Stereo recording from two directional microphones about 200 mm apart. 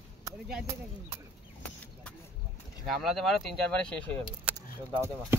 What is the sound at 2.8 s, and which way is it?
Speech, centre (ahead or behind).